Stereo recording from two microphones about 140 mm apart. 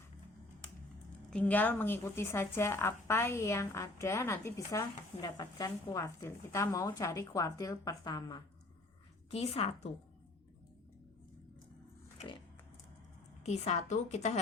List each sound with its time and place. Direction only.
1.3 s a woman's voice: 10° left (ahead or behind); by 8.4 s 30° left (ahead or behind)
9.3 s a woman's voice: 45° left (ahead or behind)
12.2 s a sound: 55° left (ahead or behind)
13.4 s a woman's voice: 50° left (ahead or behind)